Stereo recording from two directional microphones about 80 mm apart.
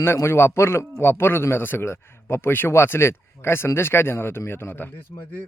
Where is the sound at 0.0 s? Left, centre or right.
Left.